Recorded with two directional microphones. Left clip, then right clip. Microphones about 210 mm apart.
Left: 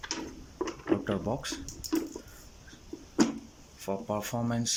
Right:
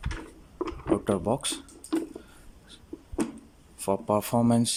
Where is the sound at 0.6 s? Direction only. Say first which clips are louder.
Right 3 dB; 15° right (ahead or behind).